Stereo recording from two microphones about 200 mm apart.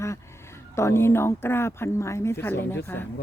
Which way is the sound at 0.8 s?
15° left (ahead or behind).